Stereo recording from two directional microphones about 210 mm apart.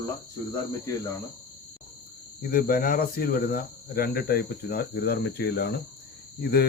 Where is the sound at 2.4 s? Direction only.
45° left (ahead or behind).